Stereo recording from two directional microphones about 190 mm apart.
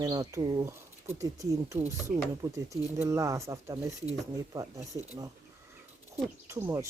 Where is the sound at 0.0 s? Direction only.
20° right (ahead or behind).